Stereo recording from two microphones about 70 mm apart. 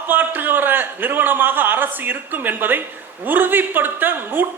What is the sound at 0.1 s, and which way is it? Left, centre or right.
A man's voice, right.